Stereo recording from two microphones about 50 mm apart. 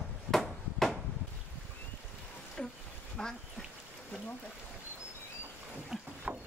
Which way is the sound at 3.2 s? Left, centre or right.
Centre.